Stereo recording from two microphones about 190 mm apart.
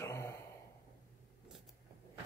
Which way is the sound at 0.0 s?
15° left (ahead or behind).